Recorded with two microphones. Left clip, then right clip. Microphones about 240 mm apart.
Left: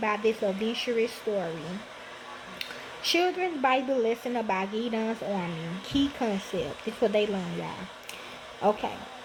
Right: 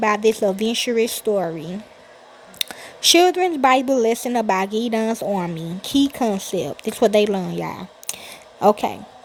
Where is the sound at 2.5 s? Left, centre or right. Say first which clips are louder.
Right 11 dB; right.